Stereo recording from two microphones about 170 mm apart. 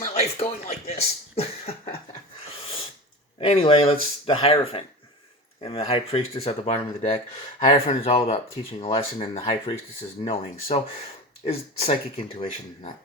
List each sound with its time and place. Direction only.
0.0 s a sound: 40° left (ahead or behind)
1.4 s cough: 40° left (ahead or behind)
3.4 s speech: 35° left (ahead or behind)